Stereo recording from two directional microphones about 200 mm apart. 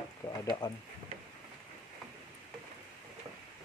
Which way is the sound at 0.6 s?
20° left (ahead or behind).